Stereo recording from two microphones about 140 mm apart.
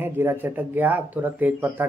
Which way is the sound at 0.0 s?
15° right (ahead or behind).